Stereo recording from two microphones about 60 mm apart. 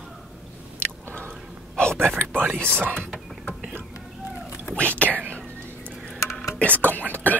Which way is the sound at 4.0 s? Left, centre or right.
Centre.